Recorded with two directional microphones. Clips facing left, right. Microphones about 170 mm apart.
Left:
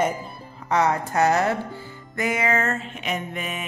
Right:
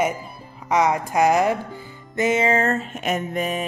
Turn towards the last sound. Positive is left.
turn(degrees=-40)  # may be behind; listen again after turning